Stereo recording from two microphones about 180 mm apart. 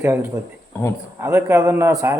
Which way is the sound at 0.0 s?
15° right (ahead or behind).